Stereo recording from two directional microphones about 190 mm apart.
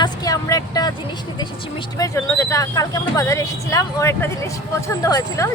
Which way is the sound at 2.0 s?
15° left (ahead or behind).